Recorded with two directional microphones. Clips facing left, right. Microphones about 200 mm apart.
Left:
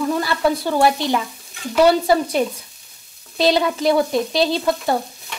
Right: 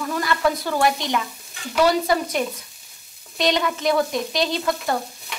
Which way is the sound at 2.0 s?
30° left (ahead or behind).